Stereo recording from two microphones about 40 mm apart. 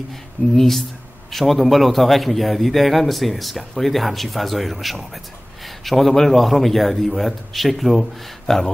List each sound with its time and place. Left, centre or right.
0.1 s a man's voice: centre